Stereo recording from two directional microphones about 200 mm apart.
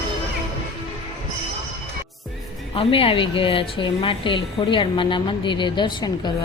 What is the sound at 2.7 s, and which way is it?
Speech, 25° left (ahead or behind).